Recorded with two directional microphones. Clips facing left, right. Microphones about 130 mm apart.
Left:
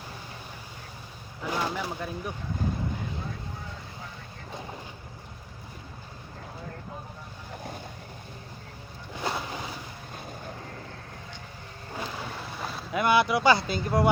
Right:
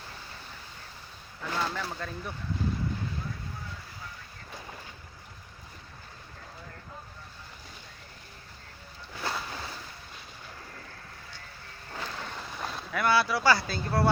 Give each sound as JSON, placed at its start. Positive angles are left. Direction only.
{"t": 1.4, "sound": "speech", "side_deg": 15}
{"t": 9.1, "sound": "a sound", "side_deg": 15}
{"t": 11.9, "sound": "boat", "side_deg": 10}
{"t": 12.9, "sound": "speech", "side_deg": 20}